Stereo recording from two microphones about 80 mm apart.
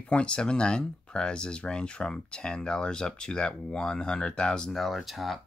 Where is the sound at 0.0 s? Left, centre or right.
Centre.